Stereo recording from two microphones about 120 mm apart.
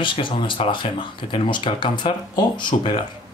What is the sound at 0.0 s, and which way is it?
Speech, 45° left (ahead or behind).